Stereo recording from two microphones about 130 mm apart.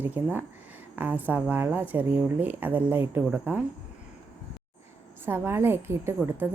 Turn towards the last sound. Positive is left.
turn(degrees=-20)  # may be behind; listen again after turning